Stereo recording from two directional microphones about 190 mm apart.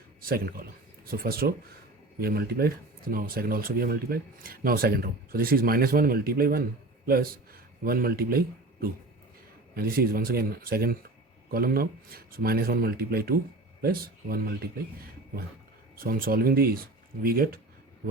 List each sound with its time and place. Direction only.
0.2 s speech: 50° right (ahead or behind)
16.0 s speech: 50° right (ahead or behind)